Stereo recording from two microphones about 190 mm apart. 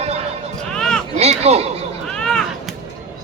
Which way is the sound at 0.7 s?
5° left (ahead or behind).